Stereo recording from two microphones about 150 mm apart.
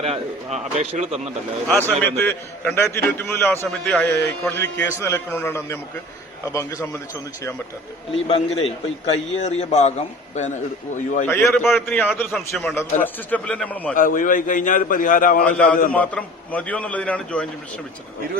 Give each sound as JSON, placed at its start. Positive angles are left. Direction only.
{"t": 0.0, "sound": "a man's voice", "side_deg": -45}
{"t": 1.6, "sound": "a man's voice", "side_deg": 10}
{"t": 8.1, "sound": "a man's voice", "side_deg": 40}
{"t": 11.3, "sound": "a man's voice", "side_deg": 15}
{"t": 12.3, "sound": "a man's voice", "side_deg": 0}
{"t": 13.9, "sound": "a man's voice", "side_deg": 60}
{"t": 15.9, "sound": "a man's voice", "side_deg": 10}